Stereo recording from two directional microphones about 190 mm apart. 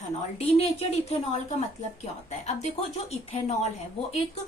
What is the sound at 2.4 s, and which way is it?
A woman's voice, 35° left (ahead or behind).